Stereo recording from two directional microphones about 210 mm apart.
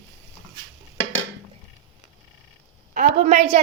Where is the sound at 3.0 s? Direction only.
40° right (ahead or behind).